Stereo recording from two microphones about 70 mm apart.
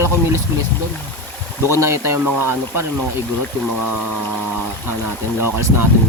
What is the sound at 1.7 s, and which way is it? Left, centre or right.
Speech, right.